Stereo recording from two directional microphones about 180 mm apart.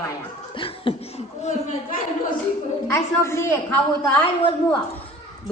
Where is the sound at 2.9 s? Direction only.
15° left (ahead or behind).